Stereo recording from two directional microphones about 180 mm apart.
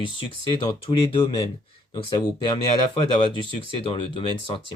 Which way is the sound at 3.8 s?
30° left (ahead or behind).